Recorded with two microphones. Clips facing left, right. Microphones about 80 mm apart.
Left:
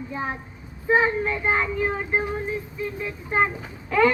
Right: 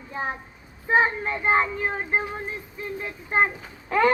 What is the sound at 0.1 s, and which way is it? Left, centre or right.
Speech, right.